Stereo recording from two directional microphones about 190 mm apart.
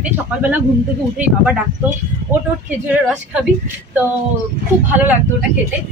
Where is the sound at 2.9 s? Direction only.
5° right (ahead or behind).